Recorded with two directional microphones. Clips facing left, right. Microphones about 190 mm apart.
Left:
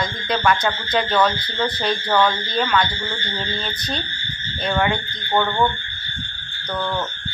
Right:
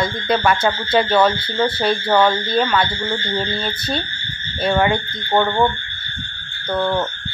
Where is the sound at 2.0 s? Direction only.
30° right (ahead or behind).